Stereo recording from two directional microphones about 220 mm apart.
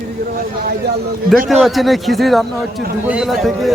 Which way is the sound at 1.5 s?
Centre (ahead or behind).